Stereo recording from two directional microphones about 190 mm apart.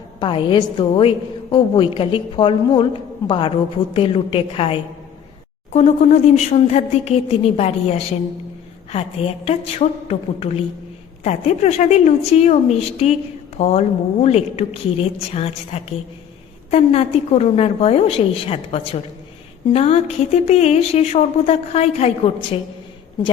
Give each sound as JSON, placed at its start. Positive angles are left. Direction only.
{"t": 0.2, "sound": "a woman's voice", "side_deg": 25}